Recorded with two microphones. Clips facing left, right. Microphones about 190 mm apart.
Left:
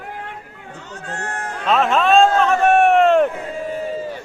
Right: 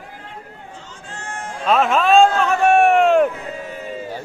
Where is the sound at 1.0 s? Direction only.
65° left (ahead or behind).